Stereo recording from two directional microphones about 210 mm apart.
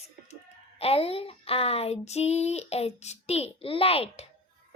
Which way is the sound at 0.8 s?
30° left (ahead or behind).